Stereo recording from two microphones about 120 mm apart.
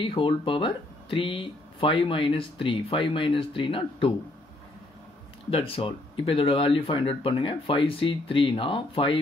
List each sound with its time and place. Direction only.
0.0 s speech: 45° left (ahead or behind)
5.5 s speech: 50° left (ahead or behind)